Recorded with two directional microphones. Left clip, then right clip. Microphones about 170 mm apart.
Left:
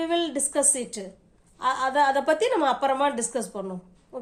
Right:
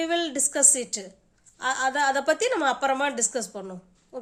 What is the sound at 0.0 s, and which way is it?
A woman's voice, 35° right (ahead or behind).